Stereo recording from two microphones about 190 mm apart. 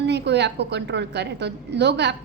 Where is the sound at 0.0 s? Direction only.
65° right (ahead or behind).